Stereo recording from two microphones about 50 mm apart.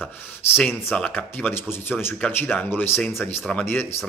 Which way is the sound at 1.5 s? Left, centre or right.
Left.